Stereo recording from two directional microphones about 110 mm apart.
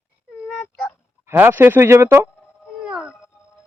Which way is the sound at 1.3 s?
20° right (ahead or behind).